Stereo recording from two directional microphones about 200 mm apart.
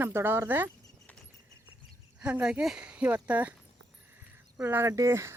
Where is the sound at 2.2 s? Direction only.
5° right (ahead or behind).